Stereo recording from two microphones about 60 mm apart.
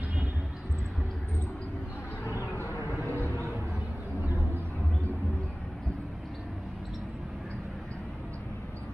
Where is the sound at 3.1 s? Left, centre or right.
Left.